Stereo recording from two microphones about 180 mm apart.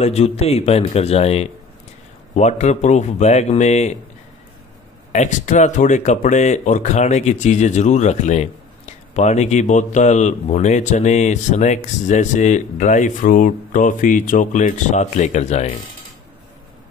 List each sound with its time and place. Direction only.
0.0 s speech: 35° left (ahead or behind)
5.1 s speech: 40° left (ahead or behind)